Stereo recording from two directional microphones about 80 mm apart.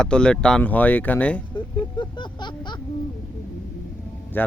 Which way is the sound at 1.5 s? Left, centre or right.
Left.